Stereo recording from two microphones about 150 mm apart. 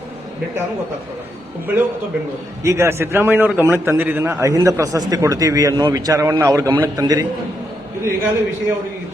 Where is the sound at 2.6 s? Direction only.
15° right (ahead or behind).